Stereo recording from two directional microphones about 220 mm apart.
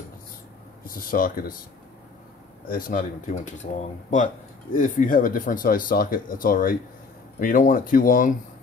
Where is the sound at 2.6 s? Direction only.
40° left (ahead or behind).